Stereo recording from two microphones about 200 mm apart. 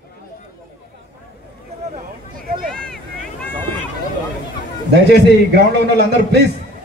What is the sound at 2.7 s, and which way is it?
Vehicle, 5° left (ahead or behind).